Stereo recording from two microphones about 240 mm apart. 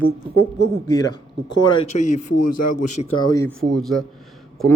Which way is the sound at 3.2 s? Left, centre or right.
Centre.